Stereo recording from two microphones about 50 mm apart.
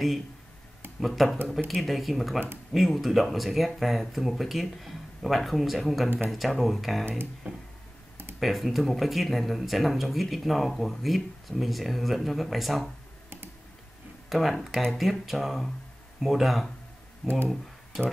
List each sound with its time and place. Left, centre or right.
1.0 s speech: centre
7.4 s a sound: right
8.4 s speech: centre
14.3 s speech: centre